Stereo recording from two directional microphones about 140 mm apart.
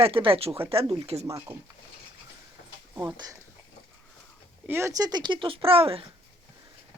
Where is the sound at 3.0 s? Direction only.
30° right (ahead or behind).